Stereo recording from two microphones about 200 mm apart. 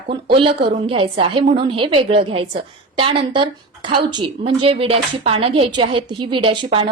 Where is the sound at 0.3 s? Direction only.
25° right (ahead or behind).